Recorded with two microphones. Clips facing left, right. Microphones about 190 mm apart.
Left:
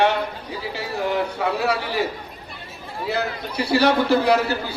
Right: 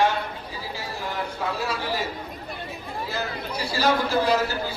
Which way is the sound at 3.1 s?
65° left (ahead or behind).